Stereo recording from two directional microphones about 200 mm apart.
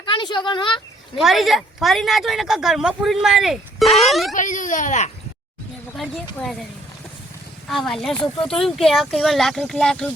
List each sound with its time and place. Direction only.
0.0 s a woman's voice: 20° left (ahead or behind)
1.2 s speech: centre (ahead or behind)
4.4 s speech: 40° left (ahead or behind)
6.0 s speech: centre (ahead or behind)
7.7 s speech: centre (ahead or behind)